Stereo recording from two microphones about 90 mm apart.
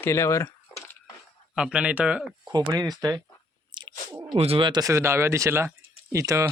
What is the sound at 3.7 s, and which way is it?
Chewing, 60° right (ahead or behind).